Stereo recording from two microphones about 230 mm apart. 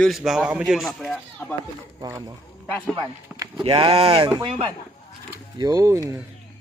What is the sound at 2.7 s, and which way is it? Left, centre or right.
Speech, centre.